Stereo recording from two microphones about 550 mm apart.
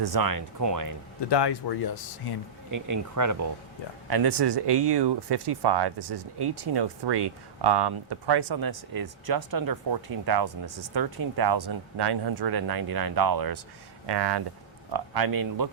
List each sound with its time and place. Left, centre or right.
0.0 s speech: right
1.3 s speech: left
2.6 s speech: right
4.1 s speech: right